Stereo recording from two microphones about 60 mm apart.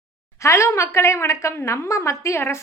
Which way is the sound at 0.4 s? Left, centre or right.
Left.